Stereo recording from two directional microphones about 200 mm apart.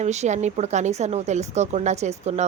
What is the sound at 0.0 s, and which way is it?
A woman's voice, 35° right (ahead or behind).